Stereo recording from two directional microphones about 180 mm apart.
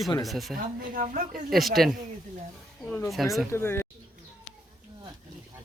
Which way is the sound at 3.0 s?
Centre (ahead or behind).